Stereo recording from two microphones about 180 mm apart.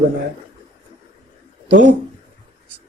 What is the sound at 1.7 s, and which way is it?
Speech, 80° right.